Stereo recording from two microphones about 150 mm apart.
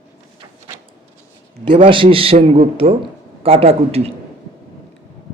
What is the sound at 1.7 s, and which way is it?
A man's voice, 35° right (ahead or behind).